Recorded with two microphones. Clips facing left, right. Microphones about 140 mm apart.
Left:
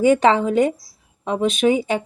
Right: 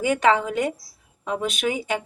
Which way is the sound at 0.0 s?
25° left (ahead or behind).